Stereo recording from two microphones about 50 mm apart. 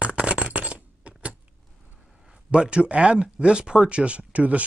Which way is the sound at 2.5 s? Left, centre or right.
Right.